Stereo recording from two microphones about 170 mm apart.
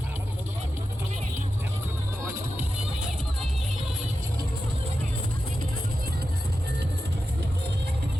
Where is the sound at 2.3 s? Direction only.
15° right (ahead or behind).